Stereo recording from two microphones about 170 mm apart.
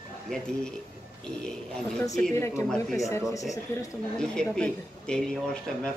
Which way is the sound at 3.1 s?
20° left (ahead or behind).